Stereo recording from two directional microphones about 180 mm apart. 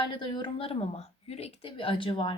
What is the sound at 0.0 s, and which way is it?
A woman's voice, 25° left (ahead or behind).